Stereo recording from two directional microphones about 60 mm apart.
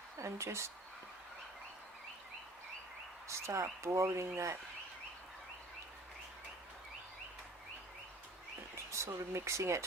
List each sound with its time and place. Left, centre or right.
0.2 s speech: right
3.2 s speech: right
8.9 s speech: right